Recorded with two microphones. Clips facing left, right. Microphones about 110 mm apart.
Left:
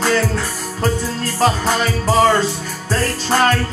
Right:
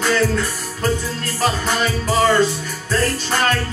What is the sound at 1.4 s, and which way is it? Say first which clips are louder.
Music: left 3 dB; 35° left (ahead or behind).